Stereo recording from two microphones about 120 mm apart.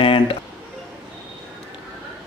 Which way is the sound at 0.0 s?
50° left (ahead or behind).